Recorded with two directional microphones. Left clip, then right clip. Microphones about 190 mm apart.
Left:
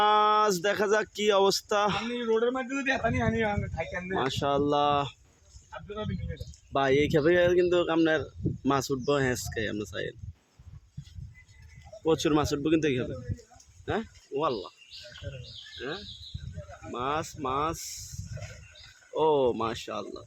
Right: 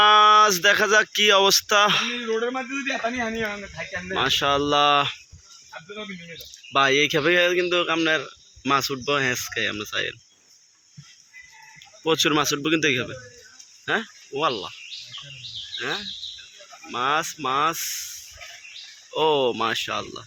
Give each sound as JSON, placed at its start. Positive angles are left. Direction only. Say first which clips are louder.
{"t": 0.0, "sound": "speech", "louder": "right 8 dB", "side_deg": 10}
{"t": 2.3, "sound": "speech", "louder": "left 2 dB", "side_deg": -30}
{"t": 4.3, "sound": "speech", "louder": "right 7 dB", "side_deg": 10}
{"t": 6.7, "sound": "speech", "louder": "right 5 dB", "side_deg": 15}
{"t": 12.0, "sound": "speech", "louder": "right 5 dB", "side_deg": 10}
{"t": 15.8, "sound": "speech", "louder": "right 8 dB", "side_deg": -15}
{"t": 16.9, "sound": "speech", "louder": "right 8 dB", "side_deg": 0}
{"t": 19.1, "sound": "speech", "louder": "right 4 dB", "side_deg": 0}